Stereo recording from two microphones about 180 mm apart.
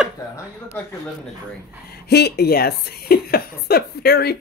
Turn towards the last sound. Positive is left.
turn(degrees=60)  # may be behind; listen again after turning